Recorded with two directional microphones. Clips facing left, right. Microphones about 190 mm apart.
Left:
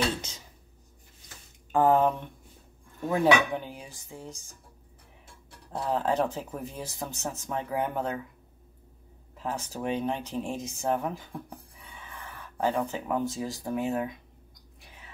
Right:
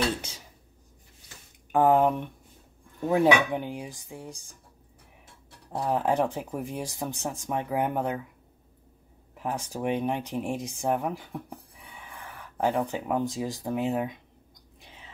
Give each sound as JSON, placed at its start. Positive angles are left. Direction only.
{"t": 1.7, "sound": "speech", "side_deg": -15}
{"t": 9.3, "sound": "speech", "side_deg": -15}
{"t": 14.8, "sound": "a sound", "side_deg": -20}